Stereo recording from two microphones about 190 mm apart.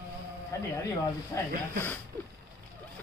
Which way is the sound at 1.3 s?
15° left (ahead or behind).